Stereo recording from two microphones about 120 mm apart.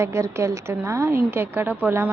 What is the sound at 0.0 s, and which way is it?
A woman's voice, 25° right (ahead or behind).